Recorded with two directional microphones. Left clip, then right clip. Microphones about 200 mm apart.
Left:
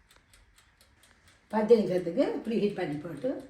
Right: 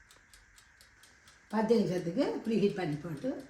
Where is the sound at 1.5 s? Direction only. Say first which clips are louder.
Left 6 dB; 50° right (ahead or behind).